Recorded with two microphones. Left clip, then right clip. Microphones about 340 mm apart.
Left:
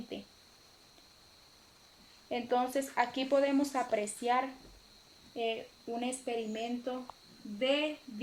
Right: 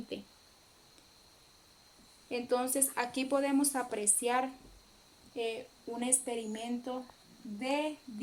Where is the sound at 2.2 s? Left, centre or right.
Right.